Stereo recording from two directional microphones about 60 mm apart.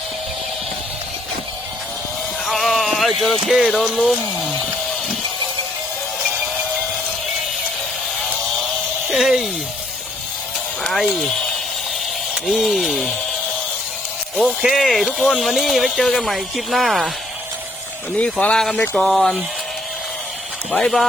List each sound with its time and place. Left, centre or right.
2.5 s speech: centre
9.1 s a sound: centre
12.3 s a sound: centre
14.6 s speech: centre
18.2 s speech: centre
18.7 s speech: centre
20.7 s speech: centre